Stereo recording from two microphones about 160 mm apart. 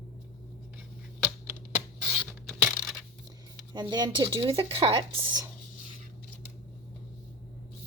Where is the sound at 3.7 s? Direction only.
25° right (ahead or behind).